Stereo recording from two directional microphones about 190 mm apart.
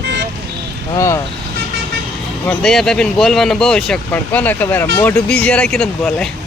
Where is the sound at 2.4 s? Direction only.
Centre (ahead or behind).